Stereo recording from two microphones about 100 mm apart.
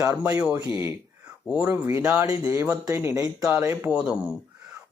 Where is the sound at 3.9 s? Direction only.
10° right (ahead or behind).